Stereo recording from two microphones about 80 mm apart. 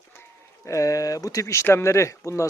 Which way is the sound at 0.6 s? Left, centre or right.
Left.